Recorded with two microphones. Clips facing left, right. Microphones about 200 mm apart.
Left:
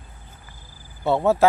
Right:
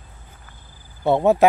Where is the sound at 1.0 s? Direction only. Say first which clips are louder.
Right 3 dB; 20° right (ahead or behind).